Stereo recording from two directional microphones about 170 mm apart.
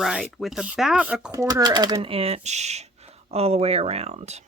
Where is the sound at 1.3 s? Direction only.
20° right (ahead or behind).